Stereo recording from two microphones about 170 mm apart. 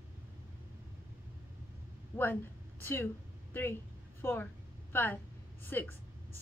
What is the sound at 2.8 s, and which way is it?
Speech, 15° left (ahead or behind).